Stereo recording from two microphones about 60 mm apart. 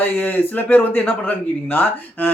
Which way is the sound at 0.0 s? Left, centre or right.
Left.